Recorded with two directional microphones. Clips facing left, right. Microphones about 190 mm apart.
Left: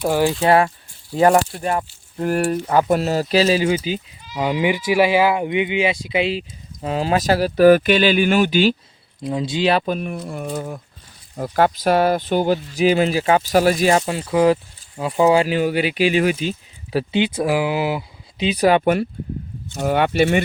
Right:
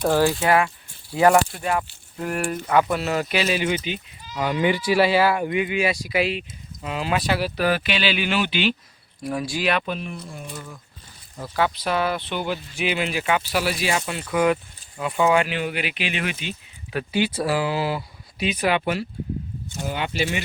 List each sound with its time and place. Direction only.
0.0 s speech: 15° left (ahead or behind)
0.3 s speech: 35° left (ahead or behind)
1.5 s speech: 40° left (ahead or behind)
4.4 s speech: 15° left (ahead or behind)
6.8 s speech: 35° left (ahead or behind)
9.2 s speech: 20° left (ahead or behind); by 10.8 s 60° left (ahead or behind)
11.3 s speech: 50° left (ahead or behind)
14.0 s speech: 30° left (ahead or behind)
17.1 s speech: 20° left (ahead or behind)
18.4 s speech: 35° left (ahead or behind)
19.7 s speech: 60° left (ahead or behind)